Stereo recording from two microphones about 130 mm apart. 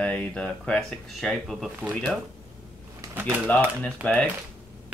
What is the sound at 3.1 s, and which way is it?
Pigeon, 15° right (ahead or behind).